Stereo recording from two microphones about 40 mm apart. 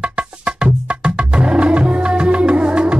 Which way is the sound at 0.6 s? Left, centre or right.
Right.